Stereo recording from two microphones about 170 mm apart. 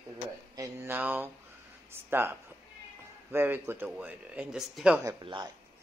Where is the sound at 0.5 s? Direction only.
15° right (ahead or behind).